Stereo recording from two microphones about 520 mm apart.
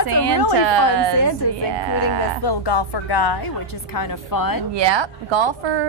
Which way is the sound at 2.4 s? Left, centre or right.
Left.